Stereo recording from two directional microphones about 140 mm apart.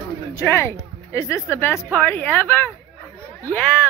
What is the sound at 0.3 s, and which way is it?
A woman's voice, 20° left (ahead or behind).